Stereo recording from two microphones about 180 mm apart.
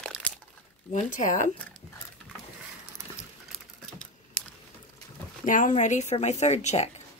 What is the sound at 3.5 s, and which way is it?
Typing, 5° left (ahead or behind).